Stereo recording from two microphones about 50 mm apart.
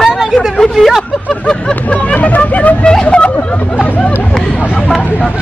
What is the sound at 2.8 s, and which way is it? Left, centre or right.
Hubbub, centre.